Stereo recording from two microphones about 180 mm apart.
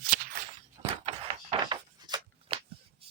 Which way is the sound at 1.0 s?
30° right (ahead or behind).